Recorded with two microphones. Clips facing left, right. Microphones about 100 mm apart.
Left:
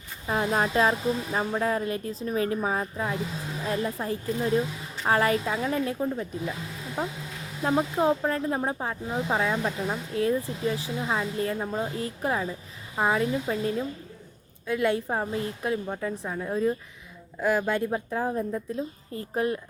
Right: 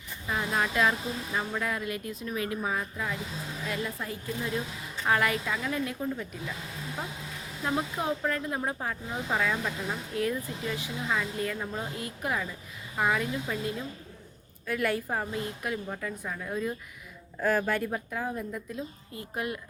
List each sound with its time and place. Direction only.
0.3 s speech: 35° left (ahead or behind)
7.6 s a woman's voice: 25° left (ahead or behind)
17.4 s a woman's voice: 15° left (ahead or behind); by 19.5 s 30° left (ahead or behind)